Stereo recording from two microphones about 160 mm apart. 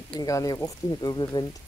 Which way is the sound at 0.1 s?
25° left (ahead or behind).